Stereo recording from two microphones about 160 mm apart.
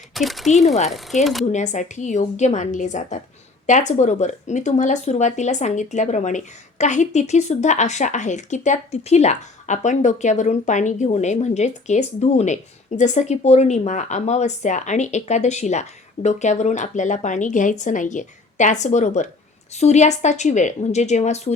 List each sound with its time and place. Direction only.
0.1 s speech: centre (ahead or behind)
1.5 s speech: 50° left (ahead or behind)